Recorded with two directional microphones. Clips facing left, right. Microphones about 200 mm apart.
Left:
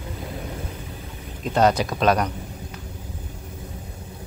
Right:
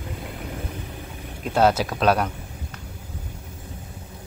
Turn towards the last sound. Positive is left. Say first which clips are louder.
# even
turn(degrees=-5)  # may be behind; listen again after turning